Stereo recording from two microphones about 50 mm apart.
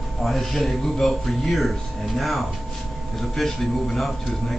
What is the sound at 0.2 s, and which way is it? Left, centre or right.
Speech, centre.